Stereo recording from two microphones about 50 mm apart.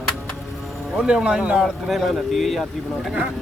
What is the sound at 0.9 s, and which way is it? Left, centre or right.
Speech, centre.